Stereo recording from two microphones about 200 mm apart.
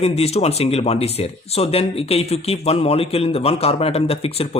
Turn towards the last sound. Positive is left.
turn(degrees=30)  # may be behind; listen again after turning